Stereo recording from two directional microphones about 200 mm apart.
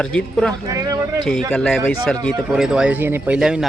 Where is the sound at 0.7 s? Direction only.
15° right (ahead or behind).